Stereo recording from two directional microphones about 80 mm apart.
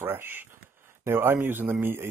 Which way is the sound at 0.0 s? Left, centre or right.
Right.